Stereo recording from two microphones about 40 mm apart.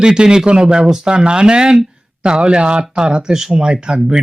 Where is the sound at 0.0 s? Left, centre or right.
Centre.